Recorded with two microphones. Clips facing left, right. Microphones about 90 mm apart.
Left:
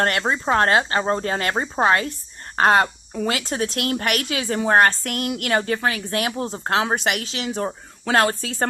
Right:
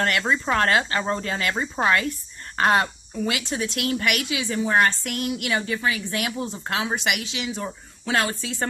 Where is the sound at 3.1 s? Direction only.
45° left (ahead or behind).